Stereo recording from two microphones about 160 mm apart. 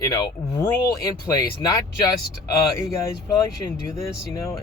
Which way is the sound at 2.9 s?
20° left (ahead or behind).